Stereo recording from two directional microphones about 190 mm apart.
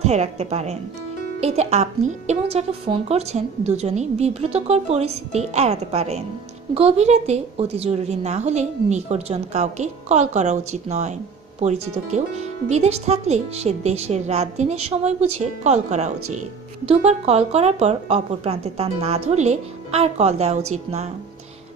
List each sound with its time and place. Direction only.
0.0 s speech: 35° right (ahead or behind)